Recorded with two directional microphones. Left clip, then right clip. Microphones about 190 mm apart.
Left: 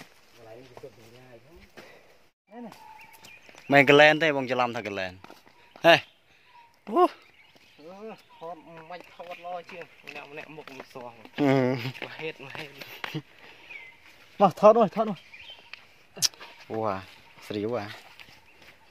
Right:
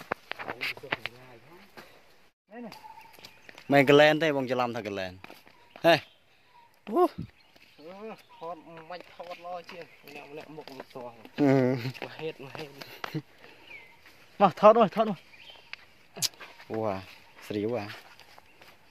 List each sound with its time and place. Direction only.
3.6 s speech: 5° right (ahead or behind)
5.8 s a sound: 5° right (ahead or behind)
6.8 s speech: centre (ahead or behind)
7.8 s a sound: 10° left (ahead or behind)
8.6 s speech: 35° left (ahead or behind)
10.1 s speech: 20° left (ahead or behind)
11.3 s speech: 10° right (ahead or behind)
12.2 s speech: 25° right (ahead or behind)
14.4 s speech: 50° left (ahead or behind)
14.8 s speech: 10° left (ahead or behind)
15.7 s a sound: centre (ahead or behind)